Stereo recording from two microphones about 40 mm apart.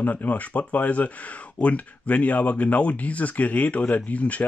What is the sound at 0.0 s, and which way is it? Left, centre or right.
Speech, left.